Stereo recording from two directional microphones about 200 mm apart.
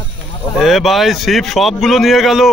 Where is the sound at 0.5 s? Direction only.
Centre (ahead or behind).